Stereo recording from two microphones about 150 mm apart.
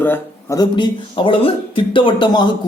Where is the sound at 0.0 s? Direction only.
15° left (ahead or behind).